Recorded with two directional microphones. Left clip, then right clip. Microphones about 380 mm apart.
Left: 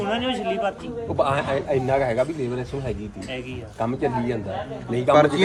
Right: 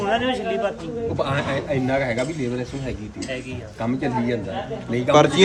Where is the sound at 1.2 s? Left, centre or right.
Centre.